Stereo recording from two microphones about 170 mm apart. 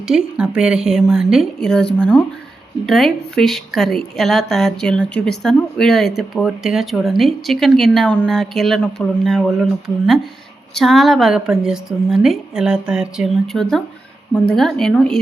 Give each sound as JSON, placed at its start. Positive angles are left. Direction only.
{"t": 0.1, "sound": "a woman's voice", "side_deg": -5}